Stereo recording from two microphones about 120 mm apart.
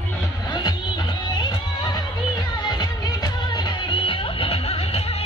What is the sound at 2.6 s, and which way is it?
Music, 35° left (ahead or behind).